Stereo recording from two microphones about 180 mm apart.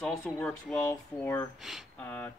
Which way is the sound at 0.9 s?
15° left (ahead or behind).